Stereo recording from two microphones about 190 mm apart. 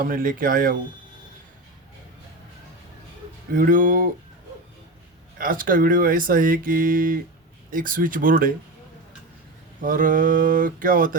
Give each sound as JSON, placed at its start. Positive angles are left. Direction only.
{"t": 0.0, "sound": "speech", "side_deg": -50}
{"t": 3.5, "sound": "speech", "side_deg": -45}
{"t": 5.4, "sound": "speech", "side_deg": -45}
{"t": 9.8, "sound": "speech", "side_deg": -45}